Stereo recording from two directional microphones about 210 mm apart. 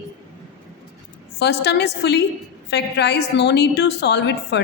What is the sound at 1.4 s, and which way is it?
A woman's voice, 55° left (ahead or behind).